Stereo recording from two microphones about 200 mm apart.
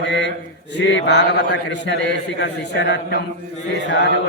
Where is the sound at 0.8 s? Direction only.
65° left (ahead or behind).